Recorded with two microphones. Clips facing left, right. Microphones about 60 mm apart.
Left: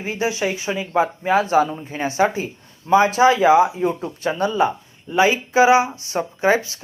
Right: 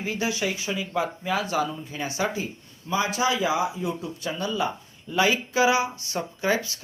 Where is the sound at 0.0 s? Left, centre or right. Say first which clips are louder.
Left 5 dB; left.